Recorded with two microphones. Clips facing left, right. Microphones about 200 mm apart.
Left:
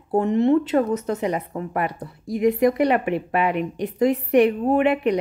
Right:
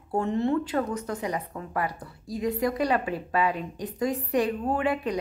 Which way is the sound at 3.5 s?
70° left (ahead or behind).